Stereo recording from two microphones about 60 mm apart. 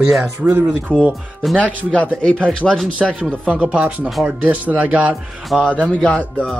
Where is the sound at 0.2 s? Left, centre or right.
Right.